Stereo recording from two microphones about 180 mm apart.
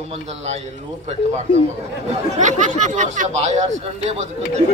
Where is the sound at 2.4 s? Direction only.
40° right (ahead or behind).